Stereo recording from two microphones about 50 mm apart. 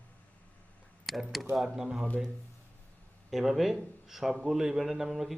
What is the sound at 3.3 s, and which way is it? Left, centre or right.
Speech, centre.